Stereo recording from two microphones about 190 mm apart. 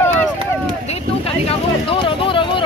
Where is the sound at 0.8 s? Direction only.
30° left (ahead or behind).